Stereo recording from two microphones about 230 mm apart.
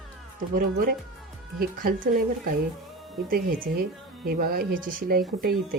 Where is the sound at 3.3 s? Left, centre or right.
Right.